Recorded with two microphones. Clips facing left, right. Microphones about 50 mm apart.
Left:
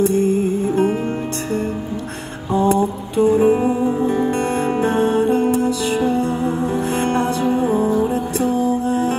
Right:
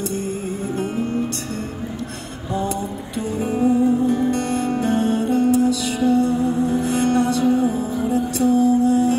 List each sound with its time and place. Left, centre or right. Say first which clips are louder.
0.0 s music: left 9 dB; left
2.6 s music: left 8 dB; left